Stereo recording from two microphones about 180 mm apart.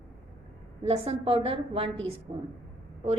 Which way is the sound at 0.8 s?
30° right (ahead or behind).